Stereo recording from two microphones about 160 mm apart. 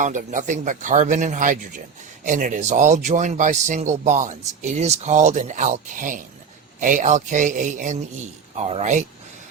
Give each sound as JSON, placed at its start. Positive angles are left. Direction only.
{"t": 0.0, "sound": "speech", "side_deg": -55}